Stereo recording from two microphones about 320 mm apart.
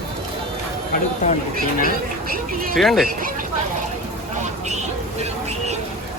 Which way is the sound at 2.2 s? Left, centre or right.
Right.